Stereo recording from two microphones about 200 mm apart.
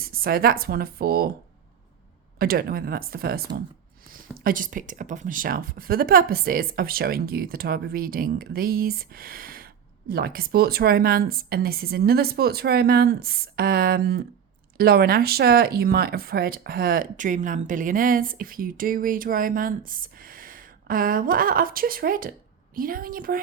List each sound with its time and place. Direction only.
0.0 s speech: 50° right (ahead or behind)
2.4 s speech: 50° right (ahead or behind)